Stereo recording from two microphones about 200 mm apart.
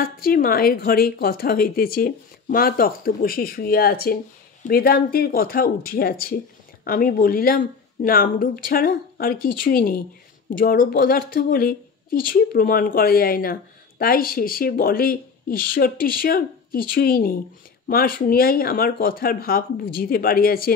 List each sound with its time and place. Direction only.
0.0 s speech: 45° left (ahead or behind)